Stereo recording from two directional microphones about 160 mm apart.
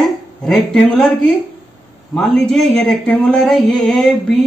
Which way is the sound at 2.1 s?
5° left (ahead or behind).